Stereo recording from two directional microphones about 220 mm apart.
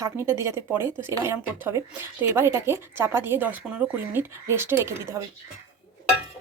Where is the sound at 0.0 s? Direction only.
10° right (ahead or behind).